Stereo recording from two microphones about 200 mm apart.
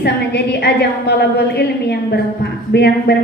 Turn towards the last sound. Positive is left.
turn(degrees=55)  # may be behind; listen again after turning